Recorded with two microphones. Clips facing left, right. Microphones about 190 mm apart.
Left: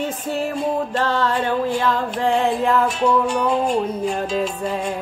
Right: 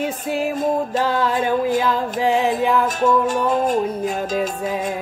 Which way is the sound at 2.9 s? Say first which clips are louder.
Right 1 dB; 45° right (ahead or behind).